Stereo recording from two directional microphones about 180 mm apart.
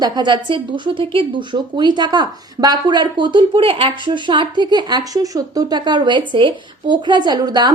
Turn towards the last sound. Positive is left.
turn(degrees=-25)  # may be behind; listen again after turning